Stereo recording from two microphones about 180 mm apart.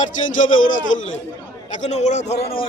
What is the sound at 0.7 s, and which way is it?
Speech, 90° left.